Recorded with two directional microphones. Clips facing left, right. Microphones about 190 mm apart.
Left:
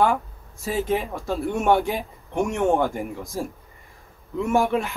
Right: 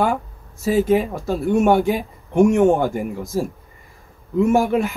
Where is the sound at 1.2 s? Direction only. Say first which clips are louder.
Right 6 dB; 45° right (ahead or behind).